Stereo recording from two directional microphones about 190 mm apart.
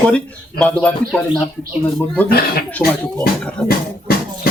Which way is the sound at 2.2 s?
55° left (ahead or behind).